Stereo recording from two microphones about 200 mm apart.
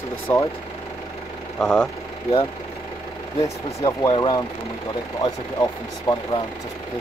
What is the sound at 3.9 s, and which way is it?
Speech, 25° left (ahead or behind).